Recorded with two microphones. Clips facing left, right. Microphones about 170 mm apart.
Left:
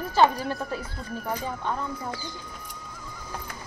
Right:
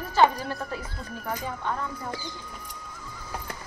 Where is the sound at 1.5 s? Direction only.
10° left (ahead or behind).